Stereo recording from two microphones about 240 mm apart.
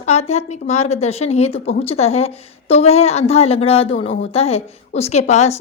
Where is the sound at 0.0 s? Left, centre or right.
Left.